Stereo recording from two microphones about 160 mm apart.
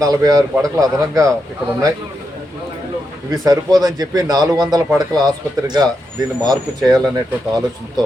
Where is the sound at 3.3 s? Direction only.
25° right (ahead or behind).